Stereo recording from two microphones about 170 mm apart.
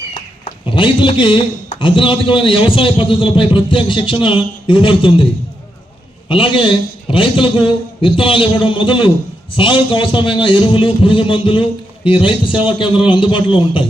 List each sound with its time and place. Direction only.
0.7 s a man's voice: 30° left (ahead or behind)
6.2 s a man's voice: 30° left (ahead or behind)